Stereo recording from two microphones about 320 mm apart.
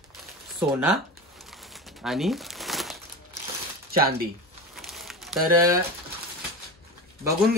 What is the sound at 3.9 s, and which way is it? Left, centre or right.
Speech, right.